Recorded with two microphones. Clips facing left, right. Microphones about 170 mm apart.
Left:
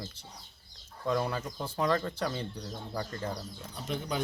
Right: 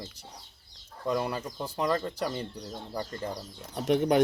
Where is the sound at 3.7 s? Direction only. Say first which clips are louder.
Right 11 dB; 70° right (ahead or behind).